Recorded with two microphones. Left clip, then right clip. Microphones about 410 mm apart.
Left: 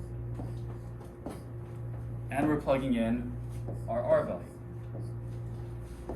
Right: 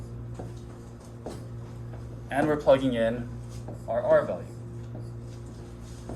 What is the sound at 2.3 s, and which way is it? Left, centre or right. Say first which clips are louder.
Speech: right 7 dB; centre.